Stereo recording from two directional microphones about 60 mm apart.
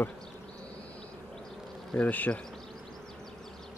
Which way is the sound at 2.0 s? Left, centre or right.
Left.